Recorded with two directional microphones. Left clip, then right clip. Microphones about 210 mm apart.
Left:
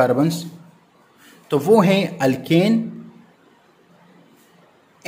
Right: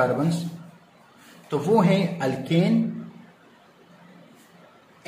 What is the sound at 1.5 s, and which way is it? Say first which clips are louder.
A man's voice: left 6 dB; 50° left (ahead or behind).